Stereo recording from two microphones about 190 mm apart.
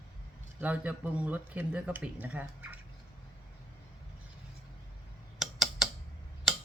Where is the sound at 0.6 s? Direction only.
5° right (ahead or behind).